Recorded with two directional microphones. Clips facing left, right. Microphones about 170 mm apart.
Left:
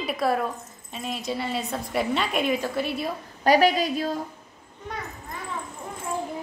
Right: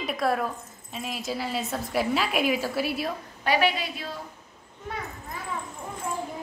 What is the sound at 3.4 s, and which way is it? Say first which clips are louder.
Speech: left 5 dB; 40° left (ahead or behind).